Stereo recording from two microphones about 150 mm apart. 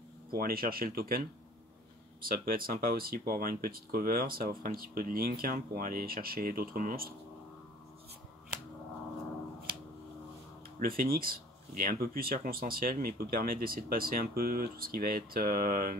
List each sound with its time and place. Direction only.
0.3 s speech: 75° right (ahead or behind)
2.2 s speech: 70° right (ahead or behind)
10.8 s speech: 75° right (ahead or behind)